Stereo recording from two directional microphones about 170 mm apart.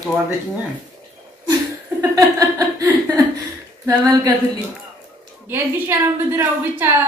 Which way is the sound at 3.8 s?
20° right (ahead or behind).